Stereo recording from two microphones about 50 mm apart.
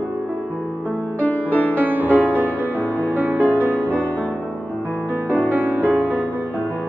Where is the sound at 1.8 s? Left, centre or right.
Right.